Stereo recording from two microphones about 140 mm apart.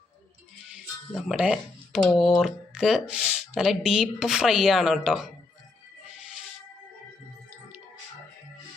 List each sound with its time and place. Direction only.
0.7 s music: 5° right (ahead or behind)
2.1 s speech: centre (ahead or behind)